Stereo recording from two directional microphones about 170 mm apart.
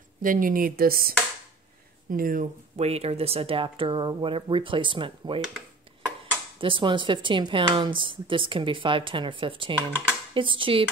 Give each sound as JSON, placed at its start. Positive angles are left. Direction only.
{"t": 0.2, "sound": "speech", "side_deg": -55}
{"t": 2.8, "sound": "speech", "side_deg": -35}
{"t": 6.6, "sound": "speech", "side_deg": -30}